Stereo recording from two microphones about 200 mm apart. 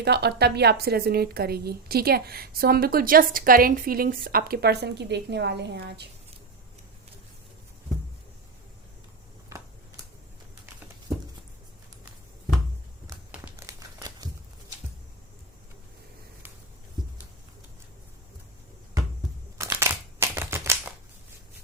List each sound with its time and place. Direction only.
0.0 s a woman's voice: 55° right (ahead or behind)
9.5 s a sound: 15° right (ahead or behind)
13.3 s crumpling: 10° right (ahead or behind)
19.5 s crumpling: 15° right (ahead or behind)